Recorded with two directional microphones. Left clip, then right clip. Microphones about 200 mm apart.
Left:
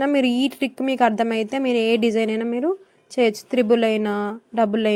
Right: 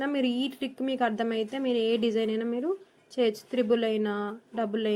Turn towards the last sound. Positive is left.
turn(degrees=40)  # may be behind; listen again after turning